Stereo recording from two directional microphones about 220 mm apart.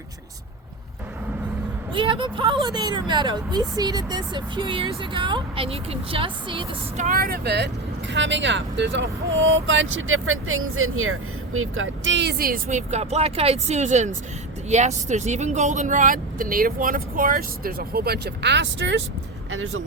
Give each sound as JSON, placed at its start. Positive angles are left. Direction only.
{"t": 1.9, "sound": "speech", "side_deg": -25}